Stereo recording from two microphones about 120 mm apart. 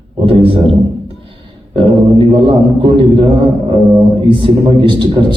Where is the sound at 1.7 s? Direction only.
45° right (ahead or behind).